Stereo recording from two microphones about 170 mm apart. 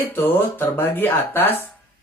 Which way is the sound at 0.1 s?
15° left (ahead or behind).